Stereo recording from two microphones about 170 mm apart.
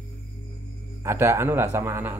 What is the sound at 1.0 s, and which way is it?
Speech, 15° right (ahead or behind).